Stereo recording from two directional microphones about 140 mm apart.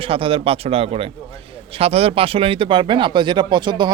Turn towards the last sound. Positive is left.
turn(degrees=-35)  # may be behind; listen again after turning